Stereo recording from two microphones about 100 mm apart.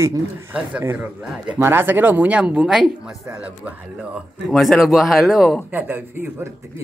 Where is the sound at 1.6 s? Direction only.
20° right (ahead or behind).